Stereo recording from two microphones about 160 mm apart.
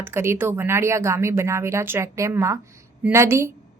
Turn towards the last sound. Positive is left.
turn(degrees=-15)  # may be behind; listen again after turning